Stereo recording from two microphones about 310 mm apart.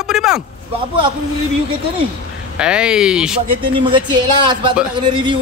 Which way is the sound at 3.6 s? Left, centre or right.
Centre.